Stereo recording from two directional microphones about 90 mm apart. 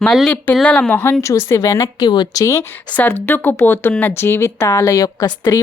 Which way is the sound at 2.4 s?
35° left (ahead or behind).